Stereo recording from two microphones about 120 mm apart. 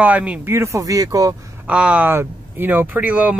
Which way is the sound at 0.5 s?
30° right (ahead or behind).